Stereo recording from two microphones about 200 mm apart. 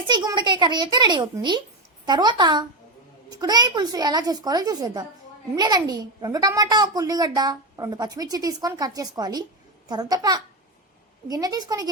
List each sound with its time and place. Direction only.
0.1 s a child's voice: 20° right (ahead or behind)